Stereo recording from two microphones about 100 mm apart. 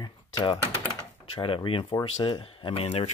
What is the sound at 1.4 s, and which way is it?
Speech, 60° left (ahead or behind).